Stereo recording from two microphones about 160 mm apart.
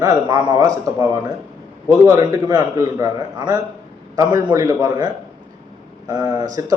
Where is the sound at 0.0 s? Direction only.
25° right (ahead or behind).